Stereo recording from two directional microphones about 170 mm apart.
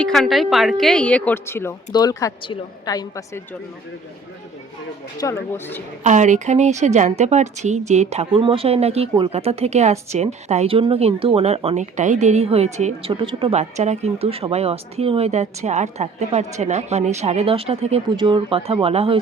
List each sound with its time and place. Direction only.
0.0 s a woman's voice: centre (ahead or behind); by 3.4 s 20° left (ahead or behind)
5.1 s a woman's voice: 15° left (ahead or behind)
6.0 s a woman's voice: 45° right (ahead or behind)